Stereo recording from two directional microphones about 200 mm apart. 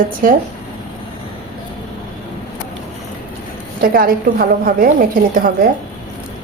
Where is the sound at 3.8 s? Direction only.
45° right (ahead or behind).